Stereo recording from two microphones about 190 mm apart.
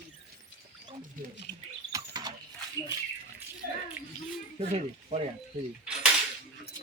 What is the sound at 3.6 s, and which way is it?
Bathtub, 50° right (ahead or behind).